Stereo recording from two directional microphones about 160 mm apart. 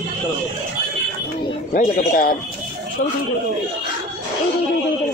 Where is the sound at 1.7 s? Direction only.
65° left (ahead or behind).